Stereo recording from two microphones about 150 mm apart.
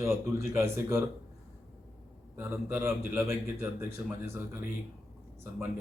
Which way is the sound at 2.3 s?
15° right (ahead or behind).